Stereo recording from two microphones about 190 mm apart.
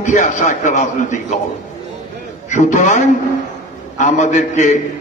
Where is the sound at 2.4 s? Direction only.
40° left (ahead or behind).